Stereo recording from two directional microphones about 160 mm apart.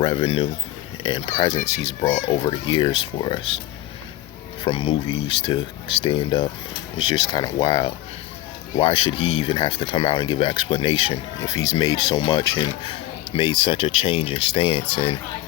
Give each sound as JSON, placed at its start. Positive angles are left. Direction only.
{"t": 0.0, "sound": "speech", "side_deg": 35}
{"t": 2.1, "sound": "speech", "side_deg": 35}
{"t": 4.6, "sound": "speech", "side_deg": 30}
{"t": 11.3, "sound": "speech", "side_deg": 20}